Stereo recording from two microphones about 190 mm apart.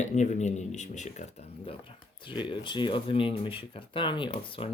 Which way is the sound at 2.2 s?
25° left (ahead or behind).